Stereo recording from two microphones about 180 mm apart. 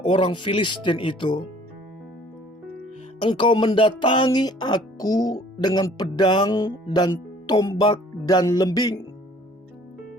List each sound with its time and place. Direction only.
0.1 s speech: 30° left (ahead or behind)
3.2 s speech: 25° left (ahead or behind)